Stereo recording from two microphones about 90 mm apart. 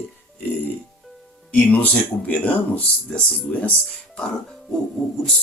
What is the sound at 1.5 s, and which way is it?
Speech, 15° left (ahead or behind).